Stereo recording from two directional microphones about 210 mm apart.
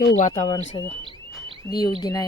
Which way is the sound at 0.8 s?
20° left (ahead or behind).